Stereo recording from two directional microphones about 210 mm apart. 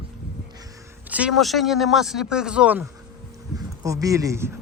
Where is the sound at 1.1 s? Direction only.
5° right (ahead or behind).